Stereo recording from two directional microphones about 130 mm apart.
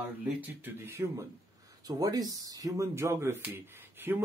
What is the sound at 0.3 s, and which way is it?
Speech, 15° right (ahead or behind).